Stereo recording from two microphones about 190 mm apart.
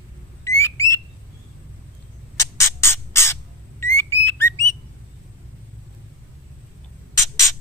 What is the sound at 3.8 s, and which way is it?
Bird, 15° left (ahead or behind).